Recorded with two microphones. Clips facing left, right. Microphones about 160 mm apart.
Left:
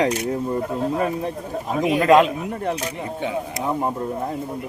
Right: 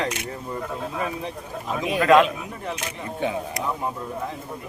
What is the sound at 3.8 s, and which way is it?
Speech, 40° left (ahead or behind).